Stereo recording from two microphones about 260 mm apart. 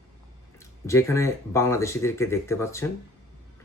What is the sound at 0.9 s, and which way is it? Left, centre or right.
Speech, centre.